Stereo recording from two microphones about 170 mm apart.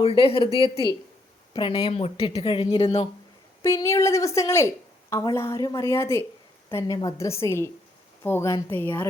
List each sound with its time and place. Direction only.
0.0 s speech: 35° left (ahead or behind)
1.5 s speech: 25° left (ahead or behind)
3.6 s a woman's voice: 15° left (ahead or behind)